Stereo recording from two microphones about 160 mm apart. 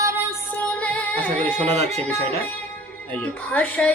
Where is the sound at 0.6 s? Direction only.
10° left (ahead or behind).